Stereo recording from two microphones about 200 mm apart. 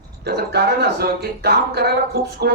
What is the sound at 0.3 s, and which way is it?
Speech, 55° right (ahead or behind).